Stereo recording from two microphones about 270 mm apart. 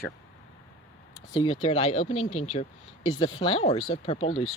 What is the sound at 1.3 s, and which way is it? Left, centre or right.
Speech, centre.